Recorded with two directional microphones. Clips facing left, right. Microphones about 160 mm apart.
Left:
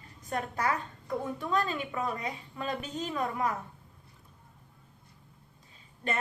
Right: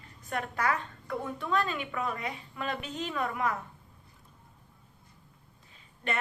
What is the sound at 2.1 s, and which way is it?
Speech, 25° left (ahead or behind).